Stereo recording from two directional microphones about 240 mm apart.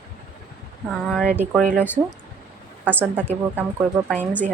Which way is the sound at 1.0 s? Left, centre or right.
Centre.